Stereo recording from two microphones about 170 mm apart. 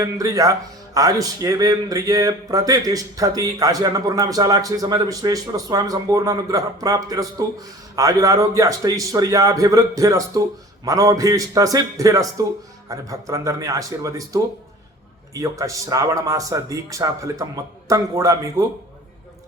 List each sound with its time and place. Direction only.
0.0 s speech: 20° right (ahead or behind)